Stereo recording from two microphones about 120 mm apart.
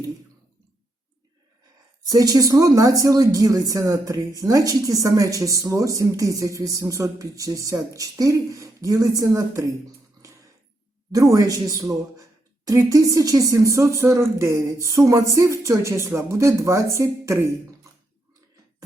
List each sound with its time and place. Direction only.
2.0 s speech: 30° right (ahead or behind)
11.1 s speech: 30° right (ahead or behind)